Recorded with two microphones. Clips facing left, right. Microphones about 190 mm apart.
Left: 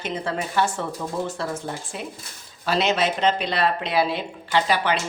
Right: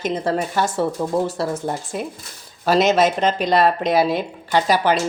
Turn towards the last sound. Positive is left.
turn(degrees=-45)  # may be behind; listen again after turning